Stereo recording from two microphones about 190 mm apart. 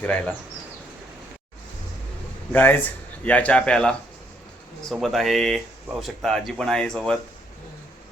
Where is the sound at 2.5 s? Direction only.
10° left (ahead or behind).